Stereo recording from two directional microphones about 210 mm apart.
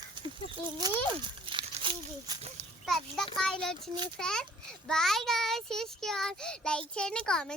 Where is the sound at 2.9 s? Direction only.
Centre (ahead or behind).